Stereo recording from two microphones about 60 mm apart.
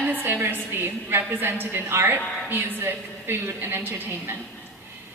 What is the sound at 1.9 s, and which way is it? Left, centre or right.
A woman's voice, right.